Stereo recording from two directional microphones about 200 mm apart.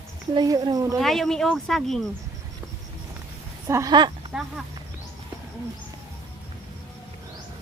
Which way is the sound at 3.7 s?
15° right (ahead or behind).